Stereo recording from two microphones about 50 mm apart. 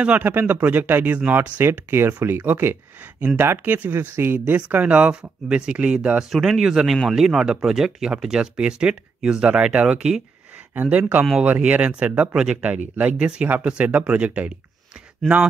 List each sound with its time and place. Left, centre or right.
0.2 s speech: right
1.6 s speech: right
2.2 s speech: right
4.6 s speech: right
6.3 s a man's voice: centre
10.9 s speech: right